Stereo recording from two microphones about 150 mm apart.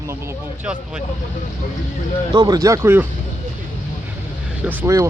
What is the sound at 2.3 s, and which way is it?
Speech, 25° right (ahead or behind).